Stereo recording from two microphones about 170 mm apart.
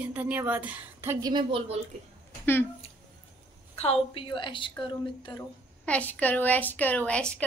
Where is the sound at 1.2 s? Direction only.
25° right (ahead or behind).